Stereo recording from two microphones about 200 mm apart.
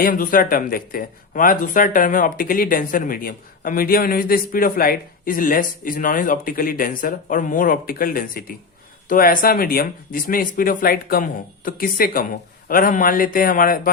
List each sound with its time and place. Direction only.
0.0 s speech: 45° left (ahead or behind)